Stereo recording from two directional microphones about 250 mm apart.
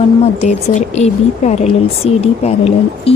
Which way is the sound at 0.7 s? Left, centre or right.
Left.